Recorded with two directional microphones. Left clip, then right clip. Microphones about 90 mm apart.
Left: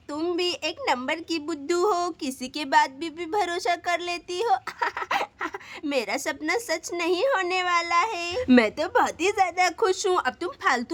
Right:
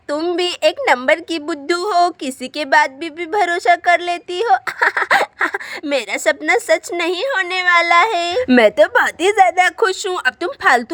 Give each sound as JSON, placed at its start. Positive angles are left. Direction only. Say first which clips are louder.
{"t": 0.3, "sound": "a woman's voice", "louder": "right 11 dB", "side_deg": -40}
{"t": 2.4, "sound": "a woman's voice", "louder": "right 8 dB", "side_deg": -25}
{"t": 4.8, "sound": "a sound", "louder": "right 12 dB", "side_deg": -50}
{"t": 5.9, "sound": "a woman's voice", "louder": "right 10 dB", "side_deg": -50}